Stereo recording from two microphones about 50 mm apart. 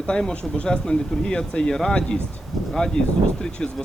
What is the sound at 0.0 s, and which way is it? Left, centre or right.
Speech, centre.